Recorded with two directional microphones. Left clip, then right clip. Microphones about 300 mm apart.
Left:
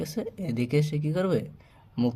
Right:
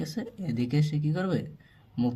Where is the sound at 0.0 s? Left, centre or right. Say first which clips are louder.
Left 3 dB; centre.